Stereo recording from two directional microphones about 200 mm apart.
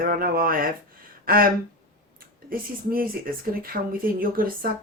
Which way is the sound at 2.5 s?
45° right (ahead or behind).